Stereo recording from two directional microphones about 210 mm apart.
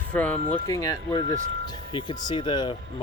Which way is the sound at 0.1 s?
5° left (ahead or behind).